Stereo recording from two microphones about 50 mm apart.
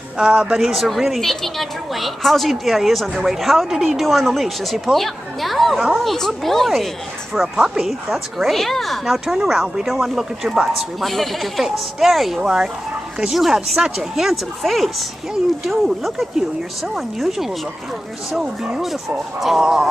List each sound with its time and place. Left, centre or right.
0.2 s speech: centre
0.6 s speech: centre
7.5 s speech: centre
7.8 s speech: centre
12.4 s speech: centre
14.6 s speech: centre
16.3 s speech: centre